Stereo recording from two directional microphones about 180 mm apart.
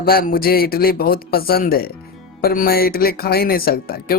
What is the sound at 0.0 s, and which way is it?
Speech, 55° left (ahead or behind).